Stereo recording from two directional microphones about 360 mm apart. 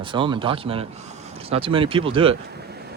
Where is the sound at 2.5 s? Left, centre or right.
Right.